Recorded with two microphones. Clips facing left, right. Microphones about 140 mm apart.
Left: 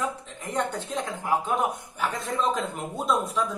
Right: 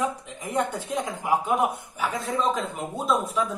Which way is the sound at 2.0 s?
Centre (ahead or behind).